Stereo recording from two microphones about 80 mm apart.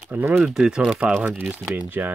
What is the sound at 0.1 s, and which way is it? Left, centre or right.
Speech, right.